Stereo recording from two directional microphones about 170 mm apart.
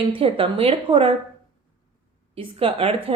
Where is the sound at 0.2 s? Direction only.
30° right (ahead or behind).